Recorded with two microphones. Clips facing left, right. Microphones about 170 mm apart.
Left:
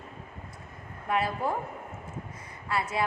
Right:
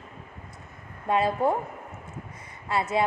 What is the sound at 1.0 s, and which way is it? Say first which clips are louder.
Speech: right 5 dB; 25° right (ahead or behind).